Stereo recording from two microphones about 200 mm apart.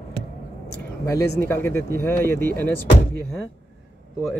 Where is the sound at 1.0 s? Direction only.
15° left (ahead or behind).